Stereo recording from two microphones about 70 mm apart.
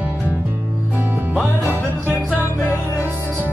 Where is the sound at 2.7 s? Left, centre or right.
Right.